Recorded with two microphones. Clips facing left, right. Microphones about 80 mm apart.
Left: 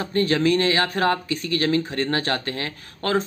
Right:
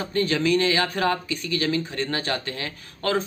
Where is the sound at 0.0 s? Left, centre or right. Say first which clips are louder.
Left 3 dB; left.